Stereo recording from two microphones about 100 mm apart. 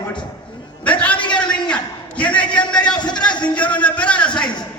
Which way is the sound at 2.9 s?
45° left (ahead or behind).